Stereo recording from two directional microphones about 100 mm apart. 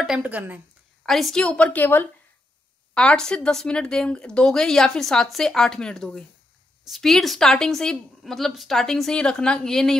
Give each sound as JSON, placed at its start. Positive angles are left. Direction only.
{"t": 0.2, "sound": "speech", "side_deg": -20}
{"t": 1.0, "sound": "a woman's voice", "side_deg": 0}